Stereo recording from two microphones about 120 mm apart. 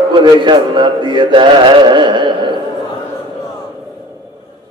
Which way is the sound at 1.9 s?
40° right (ahead or behind).